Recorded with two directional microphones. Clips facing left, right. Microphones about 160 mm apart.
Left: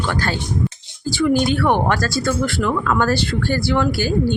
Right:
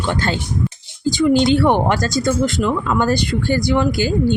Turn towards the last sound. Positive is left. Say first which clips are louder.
# right 2 dB
turn(degrees=-20)  # may be behind; listen again after turning